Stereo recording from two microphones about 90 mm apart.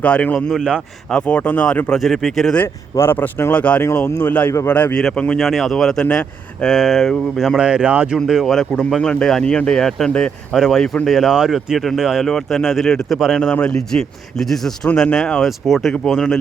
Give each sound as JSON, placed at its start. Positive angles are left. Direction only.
{"t": 0.0, "sound": "speech", "side_deg": 15}
{"t": 0.3, "sound": "speech", "side_deg": 0}
{"t": 1.1, "sound": "speech", "side_deg": 15}
{"t": 1.9, "sound": "speech", "side_deg": 5}
{"t": 3.1, "sound": "speech", "side_deg": 25}
{"t": 4.9, "sound": "speech", "side_deg": 5}